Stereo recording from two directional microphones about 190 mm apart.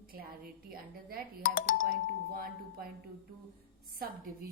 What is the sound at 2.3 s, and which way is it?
Speech, 50° right (ahead or behind).